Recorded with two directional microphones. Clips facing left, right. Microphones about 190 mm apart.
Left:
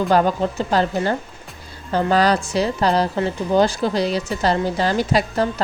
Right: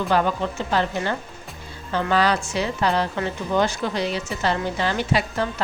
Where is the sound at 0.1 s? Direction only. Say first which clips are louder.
Left 3 dB; 40° left (ahead or behind).